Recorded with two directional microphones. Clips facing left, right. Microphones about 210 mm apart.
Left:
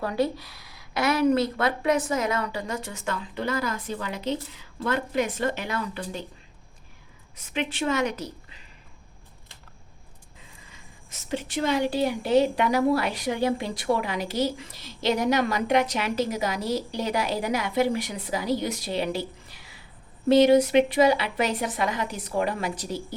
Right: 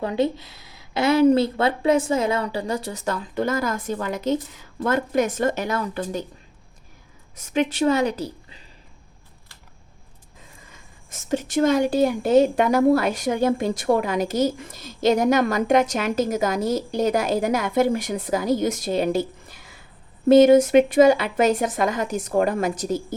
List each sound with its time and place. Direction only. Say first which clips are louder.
0.0 s speech: right 3 dB; 20° right (ahead or behind); by 6.2 s 45° right (ahead or behind)
7.3 s a woman's voice: right 7 dB; 45° right (ahead or behind)
10.7 s speech: right 2 dB; 45° right (ahead or behind)